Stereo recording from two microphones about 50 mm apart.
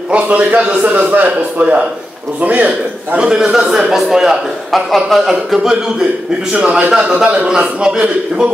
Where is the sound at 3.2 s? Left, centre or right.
Centre.